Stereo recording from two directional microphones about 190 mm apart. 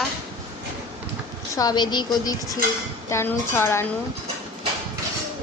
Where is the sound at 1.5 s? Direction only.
20° left (ahead or behind).